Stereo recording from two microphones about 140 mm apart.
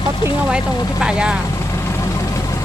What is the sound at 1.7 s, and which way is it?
Vehicle, 20° left (ahead or behind).